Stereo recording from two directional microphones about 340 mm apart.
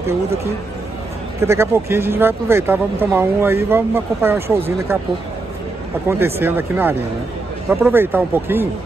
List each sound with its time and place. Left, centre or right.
1.4 s speech: centre
6.0 s speech: centre